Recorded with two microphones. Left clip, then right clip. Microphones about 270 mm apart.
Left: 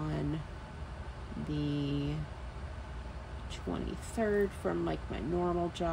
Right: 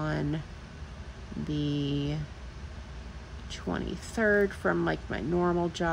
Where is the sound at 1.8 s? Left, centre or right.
Right.